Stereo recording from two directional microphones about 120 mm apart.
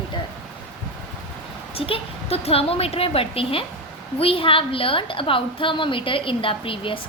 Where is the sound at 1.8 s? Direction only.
50° left (ahead or behind).